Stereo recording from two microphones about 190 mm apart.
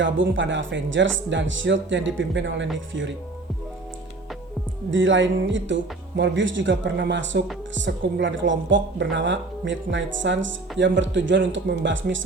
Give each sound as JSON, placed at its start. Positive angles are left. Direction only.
{"t": 0.0, "sound": "speech", "side_deg": -80}
{"t": 4.9, "sound": "speech", "side_deg": -75}